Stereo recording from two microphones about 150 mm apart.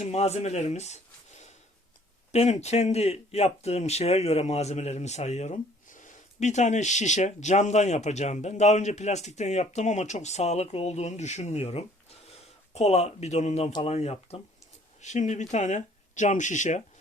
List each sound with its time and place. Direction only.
0.0 s speech: 45° left (ahead or behind)
2.3 s speech: 45° left (ahead or behind)